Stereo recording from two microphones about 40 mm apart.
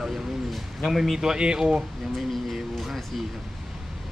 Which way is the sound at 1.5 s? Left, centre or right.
Right.